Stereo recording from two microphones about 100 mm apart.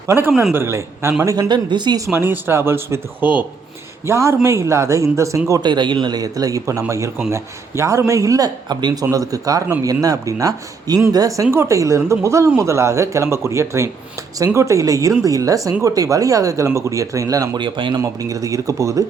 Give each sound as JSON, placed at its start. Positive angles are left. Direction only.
{"t": 0.1, "sound": "speech", "side_deg": -25}
{"t": 1.5, "sound": "speech", "side_deg": -50}
{"t": 2.1, "sound": "speech", "side_deg": -25}
{"t": 4.0, "sound": "speech", "side_deg": -30}
{"t": 5.6, "sound": "speech", "side_deg": -50}
{"t": 17.6, "sound": "a man's voice", "side_deg": -55}
{"t": 18.0, "sound": "speech", "side_deg": -35}